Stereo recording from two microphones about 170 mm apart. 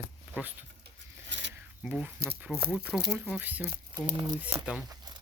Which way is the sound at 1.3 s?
90° right.